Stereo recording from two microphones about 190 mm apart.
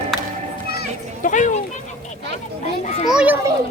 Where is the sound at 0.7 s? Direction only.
50° left (ahead or behind).